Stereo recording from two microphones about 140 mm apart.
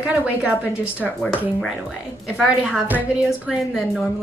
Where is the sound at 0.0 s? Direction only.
10° right (ahead or behind).